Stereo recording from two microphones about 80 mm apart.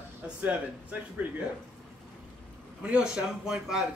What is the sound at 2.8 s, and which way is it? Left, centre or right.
Speech, centre.